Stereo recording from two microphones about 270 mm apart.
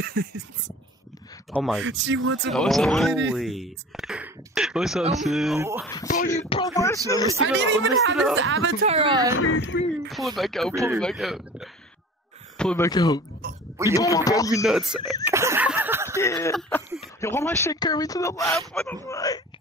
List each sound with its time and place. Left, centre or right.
0.0 s a sound: right
1.5 s speech: centre
1.8 s speech: right
2.5 s speech: centre
6.0 s a sound: left
6.5 s speech: centre
7.3 s speech: right
8.8 s a woman's voice: right
9.3 s speech: left
10.0 s speech: centre
14.6 s speech: centre
15.2 s a sound: centre
16.2 s speech: centre